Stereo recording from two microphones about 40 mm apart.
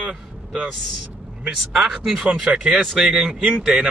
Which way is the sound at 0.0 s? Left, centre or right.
Centre.